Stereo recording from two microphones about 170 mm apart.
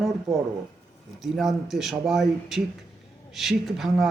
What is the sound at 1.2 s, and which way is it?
A man's voice, centre (ahead or behind).